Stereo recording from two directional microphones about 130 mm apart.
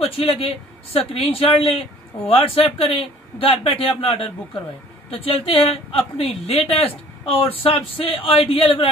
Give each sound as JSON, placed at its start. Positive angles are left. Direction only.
{"t": 0.0, "sound": "a man's voice", "side_deg": 45}